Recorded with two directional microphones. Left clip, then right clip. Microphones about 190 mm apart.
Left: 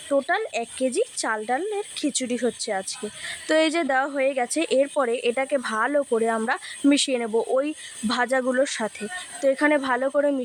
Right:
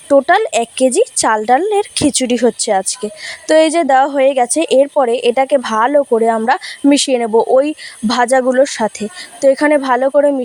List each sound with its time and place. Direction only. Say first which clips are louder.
0.1 s a woman's voice: right 13 dB; 40° right (ahead or behind)